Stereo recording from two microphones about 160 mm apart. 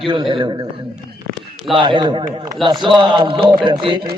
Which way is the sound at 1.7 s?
30° right (ahead or behind).